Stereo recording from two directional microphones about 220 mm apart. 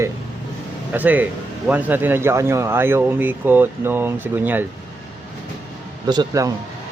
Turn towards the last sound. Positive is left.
turn(degrees=-15)  # may be behind; listen again after turning